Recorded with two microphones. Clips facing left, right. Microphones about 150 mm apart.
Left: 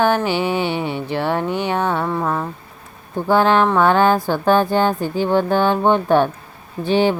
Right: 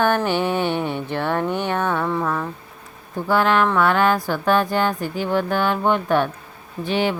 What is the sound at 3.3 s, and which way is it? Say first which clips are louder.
Speech: left 3 dB; 30° left (ahead or behind).